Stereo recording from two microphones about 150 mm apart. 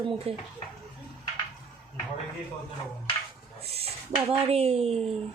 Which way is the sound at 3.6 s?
40° right (ahead or behind).